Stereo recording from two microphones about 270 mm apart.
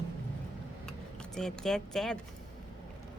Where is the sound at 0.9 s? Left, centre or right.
Centre.